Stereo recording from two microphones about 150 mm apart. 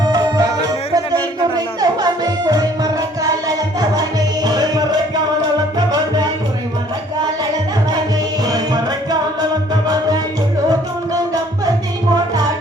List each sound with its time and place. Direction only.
0.0 s music: 25° right (ahead or behind)
1.8 s music: 25° right (ahead or behind)
4.4 s music: 25° right (ahead or behind)
8.4 s music: 25° right (ahead or behind)